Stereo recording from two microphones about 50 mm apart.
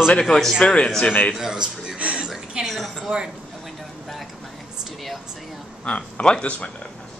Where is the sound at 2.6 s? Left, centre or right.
Centre.